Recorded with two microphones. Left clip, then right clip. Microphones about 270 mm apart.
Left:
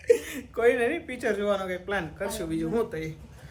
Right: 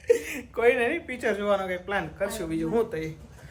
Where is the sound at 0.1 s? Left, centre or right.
Centre.